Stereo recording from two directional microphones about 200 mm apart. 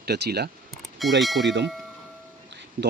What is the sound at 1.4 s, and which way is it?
Speech, 60° right (ahead or behind).